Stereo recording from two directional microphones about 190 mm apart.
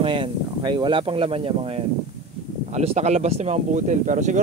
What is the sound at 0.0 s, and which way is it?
Speech, 30° right (ahead or behind).